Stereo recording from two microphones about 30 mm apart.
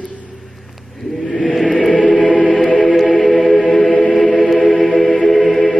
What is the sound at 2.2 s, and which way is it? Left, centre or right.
Music, left.